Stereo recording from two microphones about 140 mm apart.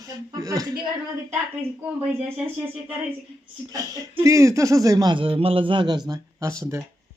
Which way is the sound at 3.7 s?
25° right (ahead or behind).